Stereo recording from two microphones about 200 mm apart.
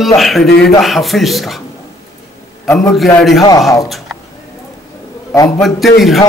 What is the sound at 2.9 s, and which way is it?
Speech, centre (ahead or behind).